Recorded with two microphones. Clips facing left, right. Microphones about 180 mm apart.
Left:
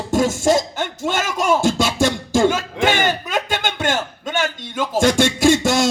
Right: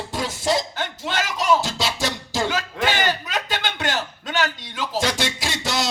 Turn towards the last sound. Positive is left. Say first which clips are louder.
# left 11 dB
turn(degrees=50)  # may be behind; listen again after turning